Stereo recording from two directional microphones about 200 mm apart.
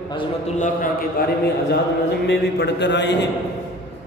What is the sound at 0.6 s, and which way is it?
A man's voice, 45° left (ahead or behind).